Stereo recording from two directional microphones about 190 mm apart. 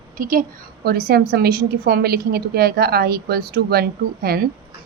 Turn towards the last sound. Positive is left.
turn(degrees=-55)  # may be behind; listen again after turning